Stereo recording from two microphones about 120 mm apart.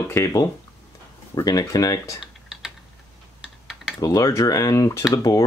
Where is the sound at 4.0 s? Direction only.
30° left (ahead or behind).